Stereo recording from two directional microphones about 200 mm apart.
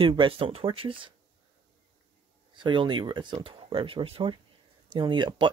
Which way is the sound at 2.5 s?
25° right (ahead or behind).